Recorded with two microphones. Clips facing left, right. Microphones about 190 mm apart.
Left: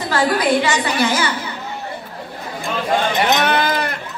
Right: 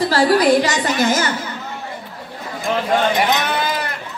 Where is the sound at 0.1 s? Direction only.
35° right (ahead or behind).